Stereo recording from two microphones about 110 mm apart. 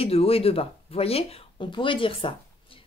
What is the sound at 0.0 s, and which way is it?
Speech, 60° left (ahead or behind).